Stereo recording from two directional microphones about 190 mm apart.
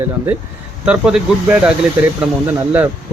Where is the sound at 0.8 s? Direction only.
5° right (ahead or behind).